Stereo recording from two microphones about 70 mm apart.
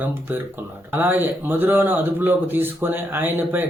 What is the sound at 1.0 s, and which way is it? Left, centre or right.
Mantra, right.